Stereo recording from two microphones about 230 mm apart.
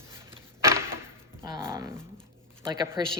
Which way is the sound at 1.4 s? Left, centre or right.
Centre.